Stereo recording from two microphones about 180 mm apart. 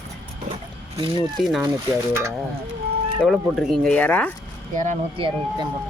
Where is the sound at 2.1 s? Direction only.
15° right (ahead or behind).